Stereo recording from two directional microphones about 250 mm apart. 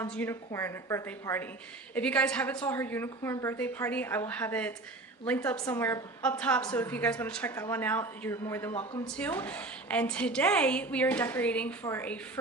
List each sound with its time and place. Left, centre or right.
0.0 s a woman's voice: centre
8.7 s speech: left
9.1 s a woman's voice: centre